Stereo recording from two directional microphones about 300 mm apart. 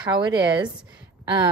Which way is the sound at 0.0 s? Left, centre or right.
Centre.